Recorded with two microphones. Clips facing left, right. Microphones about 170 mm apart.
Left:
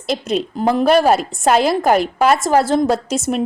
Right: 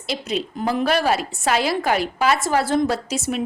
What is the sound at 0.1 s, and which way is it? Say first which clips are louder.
A woman's voice: left 5 dB; 45° left (ahead or behind).